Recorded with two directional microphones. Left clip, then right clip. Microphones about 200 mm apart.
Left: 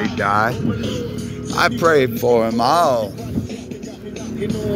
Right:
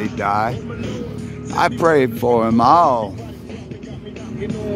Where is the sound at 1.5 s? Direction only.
20° right (ahead or behind).